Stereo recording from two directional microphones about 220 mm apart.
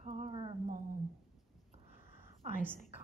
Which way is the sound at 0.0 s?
30° right (ahead or behind).